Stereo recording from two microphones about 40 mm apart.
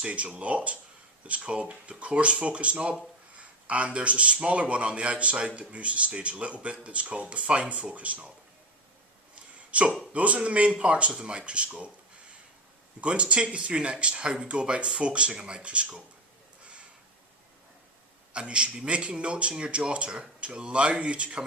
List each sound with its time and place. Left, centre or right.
0.0 s a man's voice: right
9.3 s a sound: right
10.1 s a man's voice: right
13.0 s speech: right
18.3 s speech: right